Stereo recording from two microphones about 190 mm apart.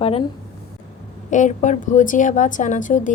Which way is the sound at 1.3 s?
40° left (ahead or behind).